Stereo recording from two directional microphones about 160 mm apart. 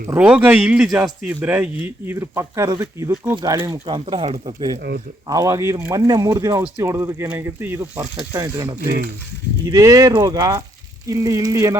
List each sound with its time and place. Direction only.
0.1 s speech: 10° right (ahead or behind)